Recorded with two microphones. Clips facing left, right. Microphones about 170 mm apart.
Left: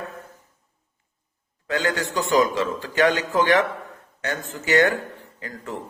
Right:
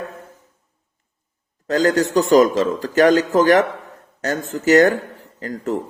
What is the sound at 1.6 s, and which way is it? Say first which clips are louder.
Speech: right 8 dB; 40° right (ahead or behind).